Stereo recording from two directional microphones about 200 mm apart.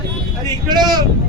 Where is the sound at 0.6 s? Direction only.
20° right (ahead or behind).